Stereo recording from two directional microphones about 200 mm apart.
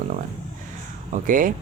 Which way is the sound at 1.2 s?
40° right (ahead or behind).